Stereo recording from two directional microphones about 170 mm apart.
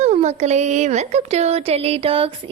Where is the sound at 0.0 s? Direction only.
40° right (ahead or behind).